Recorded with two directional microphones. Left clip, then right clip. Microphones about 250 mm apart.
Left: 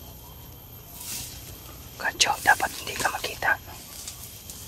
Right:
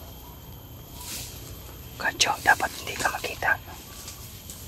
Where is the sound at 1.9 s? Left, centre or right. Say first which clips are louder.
Even; centre.